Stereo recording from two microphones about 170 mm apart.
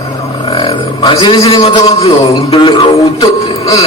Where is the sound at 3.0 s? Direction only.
20° left (ahead or behind).